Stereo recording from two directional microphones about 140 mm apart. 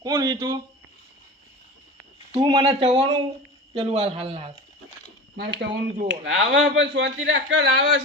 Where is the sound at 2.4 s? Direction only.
30° right (ahead or behind).